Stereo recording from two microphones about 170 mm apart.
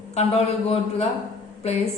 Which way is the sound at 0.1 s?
40° left (ahead or behind).